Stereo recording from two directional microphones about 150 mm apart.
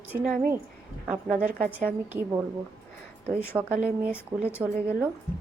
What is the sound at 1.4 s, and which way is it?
Speech, 65° right (ahead or behind).